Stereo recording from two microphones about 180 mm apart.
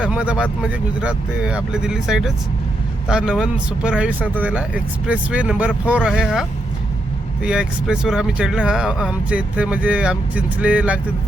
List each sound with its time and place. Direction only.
0.0 s speech: 5° right (ahead or behind)
7.4 s speech: 5° right (ahead or behind)